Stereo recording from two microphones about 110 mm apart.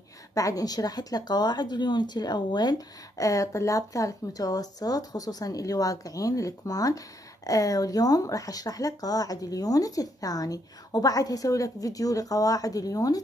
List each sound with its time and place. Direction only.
0.3 s a woman's voice: 30° left (ahead or behind)